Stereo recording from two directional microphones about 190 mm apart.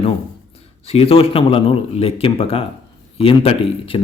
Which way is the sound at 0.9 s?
30° left (ahead or behind).